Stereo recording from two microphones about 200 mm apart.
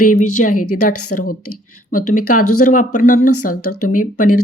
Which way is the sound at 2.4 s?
90° left.